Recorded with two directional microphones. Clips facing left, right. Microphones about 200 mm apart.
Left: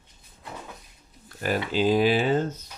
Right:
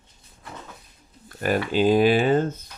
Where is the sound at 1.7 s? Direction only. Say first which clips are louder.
Right 3 dB; 55° right (ahead or behind).